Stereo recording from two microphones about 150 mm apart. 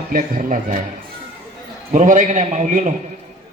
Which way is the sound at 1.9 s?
55° right (ahead or behind).